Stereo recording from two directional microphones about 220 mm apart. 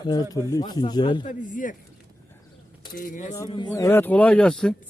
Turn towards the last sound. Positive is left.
turn(degrees=5)  # may be behind; listen again after turning